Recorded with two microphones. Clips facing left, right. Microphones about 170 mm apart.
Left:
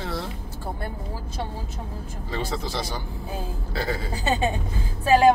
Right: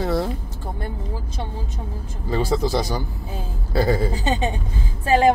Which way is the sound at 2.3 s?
40° right (ahead or behind).